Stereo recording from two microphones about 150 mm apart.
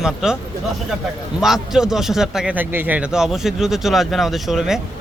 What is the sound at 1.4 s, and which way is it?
A man's voice, 5° right (ahead or behind).